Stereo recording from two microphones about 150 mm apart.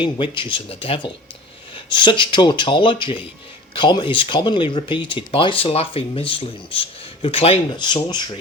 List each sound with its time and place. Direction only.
0.0 s speech: 35° left (ahead or behind)